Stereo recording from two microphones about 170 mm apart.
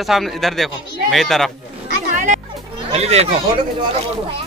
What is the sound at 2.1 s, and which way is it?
Music, 50° right (ahead or behind).